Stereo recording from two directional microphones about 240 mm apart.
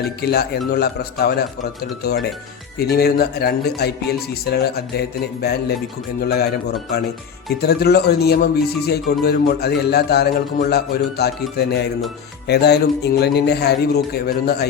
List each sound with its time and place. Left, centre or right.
0.2 s a man's voice: left
2.9 s a man's voice: left